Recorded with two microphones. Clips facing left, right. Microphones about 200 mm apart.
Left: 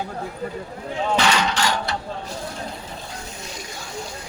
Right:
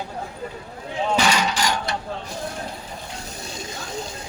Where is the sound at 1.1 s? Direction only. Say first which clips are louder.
Even; 10° right (ahead or behind).